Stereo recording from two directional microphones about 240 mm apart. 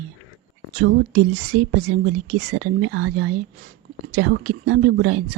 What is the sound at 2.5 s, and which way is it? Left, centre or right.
A woman's voice, right.